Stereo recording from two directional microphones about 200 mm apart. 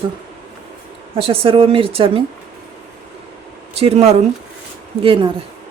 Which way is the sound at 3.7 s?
30° right (ahead or behind).